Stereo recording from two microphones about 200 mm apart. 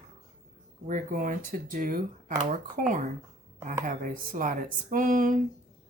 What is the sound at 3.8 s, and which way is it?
Speech, 40° right (ahead or behind).